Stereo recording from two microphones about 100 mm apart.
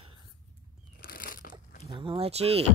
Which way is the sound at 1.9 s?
60° right (ahead or behind).